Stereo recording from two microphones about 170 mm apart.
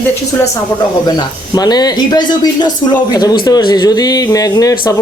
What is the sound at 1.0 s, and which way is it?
Speech, 25° left (ahead or behind).